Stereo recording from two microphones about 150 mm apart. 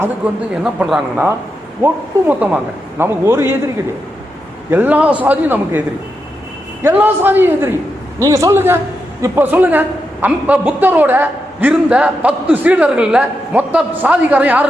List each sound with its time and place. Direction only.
0.5 s a woman's voice: 5° right (ahead or behind)
4.7 s a woman's voice: 10° right (ahead or behind)
6.8 s a woman's voice: 15° right (ahead or behind)